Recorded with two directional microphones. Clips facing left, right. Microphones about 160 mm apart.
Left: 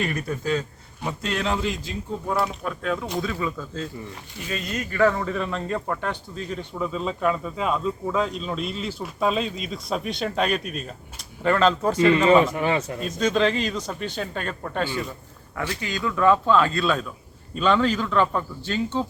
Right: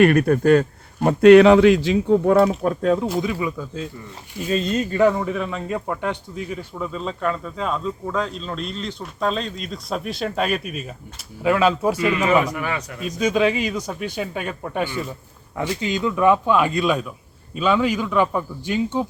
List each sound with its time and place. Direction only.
0.0 s a man's voice: 65° right (ahead or behind)
2.5 s speech: 40° right (ahead or behind)
3.2 s speech: 15° right (ahead or behind)
4.4 s speech: 30° right (ahead or behind)
5.0 s speech: 15° right (ahead or behind)
6.7 s speech: centre (ahead or behind)
12.5 s a man's voice: 30° left (ahead or behind)
13.0 s speech: 10° right (ahead or behind)